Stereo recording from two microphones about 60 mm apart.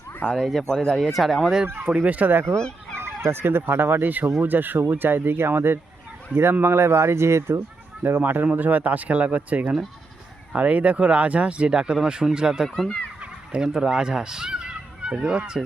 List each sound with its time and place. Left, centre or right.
0.4 s speech: centre
0.9 s speech: centre
1.8 s speech: centre
2.6 s fowl: centre
3.0 s speech: right
8.0 s speech: right; by 12.6 s centre
12.6 s speech: centre
13.5 s speech: centre